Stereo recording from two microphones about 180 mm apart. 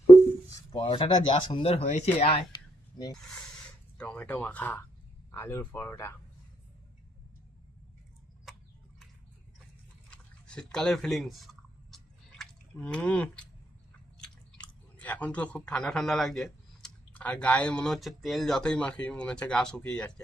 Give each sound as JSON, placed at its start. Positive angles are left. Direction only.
{"t": 0.7, "sound": "speech", "side_deg": 30}
{"t": 3.9, "sound": "speech", "side_deg": 5}
{"t": 10.1, "sound": "chewing", "side_deg": 5}
{"t": 12.4, "sound": "speech", "side_deg": 5}